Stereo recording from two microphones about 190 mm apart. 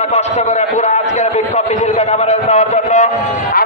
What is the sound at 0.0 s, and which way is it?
A man's voice, 35° left (ahead or behind).